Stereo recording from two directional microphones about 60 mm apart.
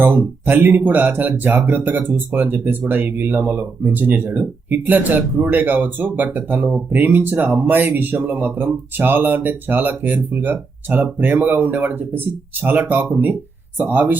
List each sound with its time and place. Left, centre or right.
0.0 s speech: right